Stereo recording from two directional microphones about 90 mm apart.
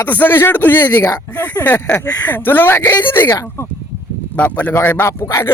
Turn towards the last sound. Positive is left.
turn(degrees=30)  # may be behind; listen again after turning